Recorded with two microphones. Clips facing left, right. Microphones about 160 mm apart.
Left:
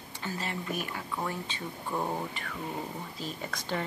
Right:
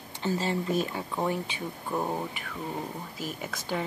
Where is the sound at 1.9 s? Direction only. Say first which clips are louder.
Right 2 dB; 10° right (ahead or behind).